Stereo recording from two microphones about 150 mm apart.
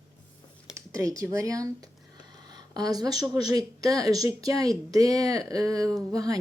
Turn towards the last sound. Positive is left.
turn(degrees=-25)  # may be behind; listen again after turning